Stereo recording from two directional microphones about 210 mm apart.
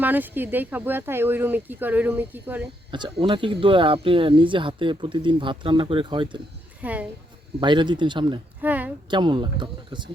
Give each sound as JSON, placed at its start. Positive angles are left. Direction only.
{"t": 0.0, "sound": "speech", "side_deg": -10}
{"t": 2.9, "sound": "speech", "side_deg": -20}
{"t": 6.8, "sound": "speech", "side_deg": -5}
{"t": 7.6, "sound": "speech", "side_deg": -20}
{"t": 8.6, "sound": "a woman's voice", "side_deg": -5}
{"t": 9.0, "sound": "speech", "side_deg": -20}